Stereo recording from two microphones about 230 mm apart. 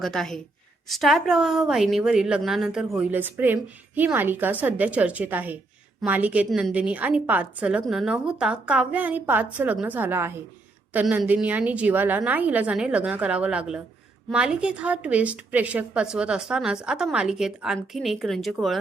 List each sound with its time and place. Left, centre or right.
0.0 s a woman's voice: centre